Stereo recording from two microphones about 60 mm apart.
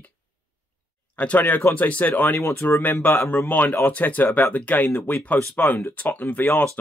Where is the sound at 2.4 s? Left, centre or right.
Left.